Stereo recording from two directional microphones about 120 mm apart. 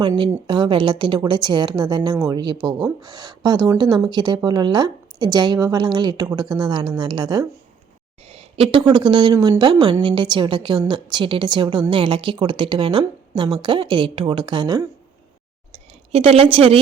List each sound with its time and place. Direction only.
0.4 s a woman's voice: 40° right (ahead or behind)
8.2 s a sound: 55° right (ahead or behind)
8.8 s a woman's voice: 40° right (ahead or behind)
15.7 s speech: 55° right (ahead or behind)